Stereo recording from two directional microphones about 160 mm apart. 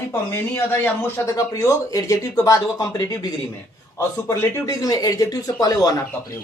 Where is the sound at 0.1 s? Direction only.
15° left (ahead or behind).